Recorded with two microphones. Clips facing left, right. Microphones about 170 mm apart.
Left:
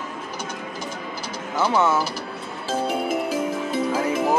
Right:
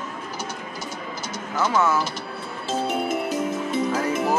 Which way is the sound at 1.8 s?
25° left (ahead or behind).